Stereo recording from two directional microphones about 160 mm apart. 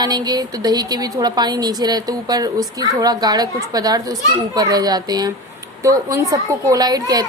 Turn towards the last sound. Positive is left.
turn(degrees=-25)  # may be behind; listen again after turning